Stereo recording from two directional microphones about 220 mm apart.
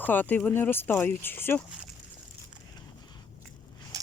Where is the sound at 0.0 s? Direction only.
10° left (ahead or behind).